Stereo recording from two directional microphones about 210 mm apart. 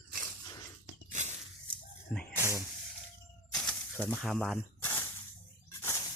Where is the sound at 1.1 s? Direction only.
30° right (ahead or behind).